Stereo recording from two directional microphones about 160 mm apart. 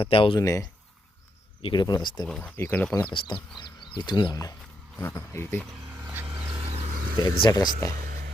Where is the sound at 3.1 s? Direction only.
30° left (ahead or behind).